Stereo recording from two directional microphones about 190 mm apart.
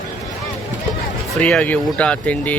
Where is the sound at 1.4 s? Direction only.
5° left (ahead or behind).